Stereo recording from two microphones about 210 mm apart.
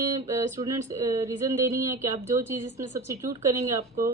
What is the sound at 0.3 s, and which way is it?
Speech, 15° right (ahead or behind).